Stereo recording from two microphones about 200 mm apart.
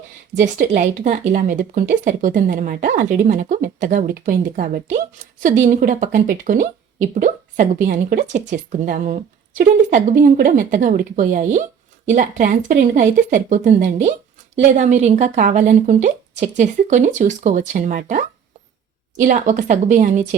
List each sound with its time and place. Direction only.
0.3 s speech: 40° right (ahead or behind)
19.2 s speech: 40° right (ahead or behind)